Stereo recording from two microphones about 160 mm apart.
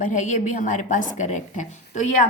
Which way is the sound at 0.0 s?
50° left (ahead or behind).